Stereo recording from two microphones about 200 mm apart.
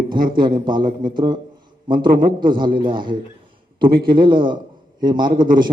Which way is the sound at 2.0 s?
45° right (ahead or behind).